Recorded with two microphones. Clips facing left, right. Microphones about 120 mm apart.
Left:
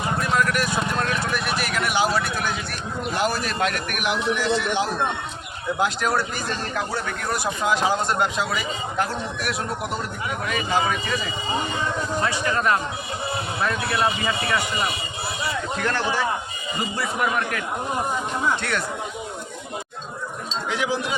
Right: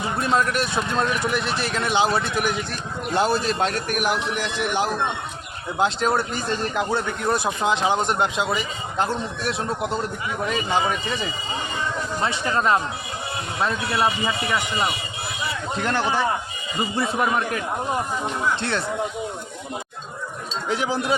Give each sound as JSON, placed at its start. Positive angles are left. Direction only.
{"t": 0.2, "sound": "a sound", "side_deg": -25}
{"t": 2.1, "sound": "a man's voice", "side_deg": -20}
{"t": 3.2, "sound": "a man's voice", "side_deg": -30}
{"t": 5.8, "sound": "a man's voice", "side_deg": -25}
{"t": 12.2, "sound": "a man's voice", "side_deg": -25}
{"t": 15.8, "sound": "a man's voice", "side_deg": -20}
{"t": 20.7, "sound": "a man's voice", "side_deg": -35}